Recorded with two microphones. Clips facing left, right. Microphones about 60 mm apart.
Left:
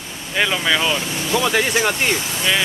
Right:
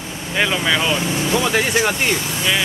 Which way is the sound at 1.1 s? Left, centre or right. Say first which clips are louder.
Right 2 dB; centre.